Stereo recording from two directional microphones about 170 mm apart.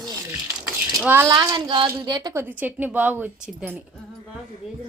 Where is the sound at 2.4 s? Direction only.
10° right (ahead or behind).